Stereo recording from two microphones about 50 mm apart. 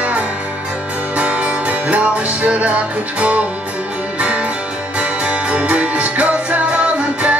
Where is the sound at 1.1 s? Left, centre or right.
Right.